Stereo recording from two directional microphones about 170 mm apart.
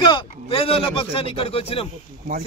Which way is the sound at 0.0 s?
30° left (ahead or behind).